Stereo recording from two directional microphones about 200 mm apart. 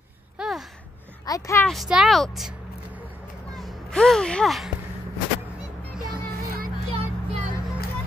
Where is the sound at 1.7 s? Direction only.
Centre (ahead or behind).